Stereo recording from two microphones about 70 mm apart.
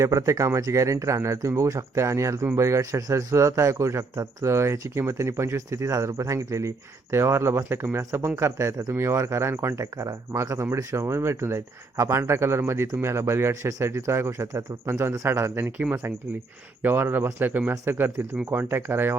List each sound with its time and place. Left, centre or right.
0.0 s speech: right
4.5 s speech: right
15.6 s speech: centre
16.8 s speech: right